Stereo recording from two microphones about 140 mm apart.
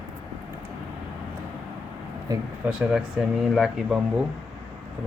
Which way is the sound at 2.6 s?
5° right (ahead or behind).